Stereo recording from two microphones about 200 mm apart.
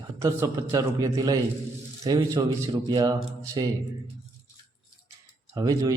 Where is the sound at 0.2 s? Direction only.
15° right (ahead or behind).